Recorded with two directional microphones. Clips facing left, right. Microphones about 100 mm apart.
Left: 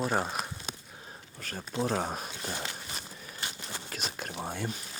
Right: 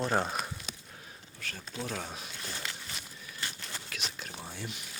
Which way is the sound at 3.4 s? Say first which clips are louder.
Left 1 dB; 20° left (ahead or behind).